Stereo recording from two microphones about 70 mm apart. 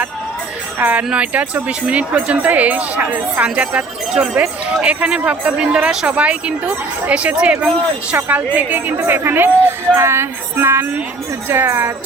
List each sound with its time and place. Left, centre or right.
0.8 s speech: right
9.0 s music: right